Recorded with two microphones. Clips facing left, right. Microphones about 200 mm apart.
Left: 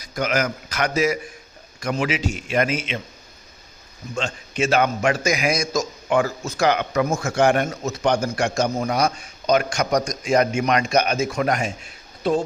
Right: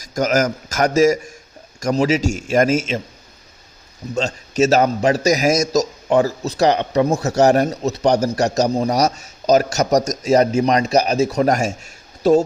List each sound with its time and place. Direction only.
0.0 s a man's voice: 45° right (ahead or behind)
4.1 s a man's voice: 40° right (ahead or behind)